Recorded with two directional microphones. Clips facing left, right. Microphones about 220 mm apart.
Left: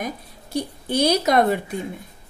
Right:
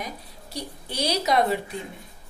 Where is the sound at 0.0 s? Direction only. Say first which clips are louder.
Left 6 dB; 50° left (ahead or behind).